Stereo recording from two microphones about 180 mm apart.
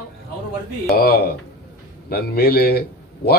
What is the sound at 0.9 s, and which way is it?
A man's voice, 60° left (ahead or behind).